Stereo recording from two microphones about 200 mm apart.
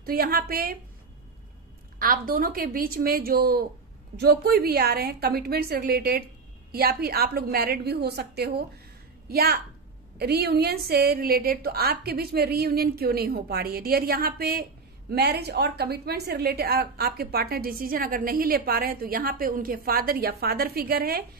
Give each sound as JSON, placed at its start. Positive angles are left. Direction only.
{"t": 0.0, "sound": "a woman's voice", "side_deg": -50}
{"t": 2.0, "sound": "a woman's voice", "side_deg": -45}